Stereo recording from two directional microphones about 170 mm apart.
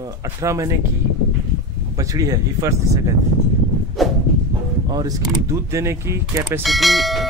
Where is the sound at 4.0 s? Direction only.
Centre (ahead or behind).